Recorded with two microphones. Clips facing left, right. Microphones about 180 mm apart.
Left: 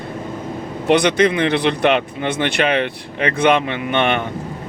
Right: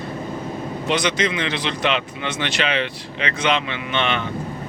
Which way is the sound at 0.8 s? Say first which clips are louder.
Left 8 dB; 60° left (ahead or behind).